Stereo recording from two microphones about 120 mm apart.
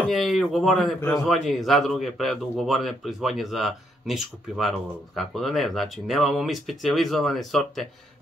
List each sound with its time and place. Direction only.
0.1 s a man's voice: centre (ahead or behind)